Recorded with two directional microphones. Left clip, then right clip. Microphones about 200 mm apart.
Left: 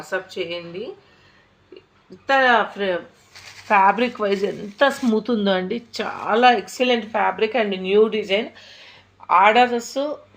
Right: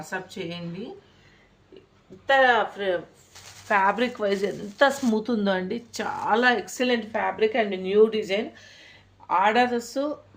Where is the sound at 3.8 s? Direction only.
15° left (ahead or behind).